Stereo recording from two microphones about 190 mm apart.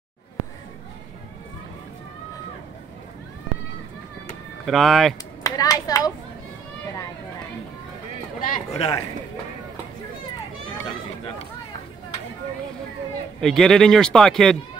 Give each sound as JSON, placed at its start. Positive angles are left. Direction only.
{"t": 4.6, "sound": "speech", "side_deg": 0}
{"t": 5.4, "sound": "clapping", "side_deg": 20}
{"t": 8.4, "sound": "speech", "side_deg": 45}
{"t": 13.4, "sound": "speech", "side_deg": 0}